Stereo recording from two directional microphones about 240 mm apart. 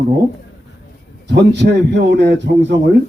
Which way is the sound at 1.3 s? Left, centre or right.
Right.